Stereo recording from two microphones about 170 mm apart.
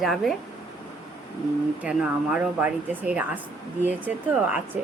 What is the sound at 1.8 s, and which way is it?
Speech, 5° right (ahead or behind).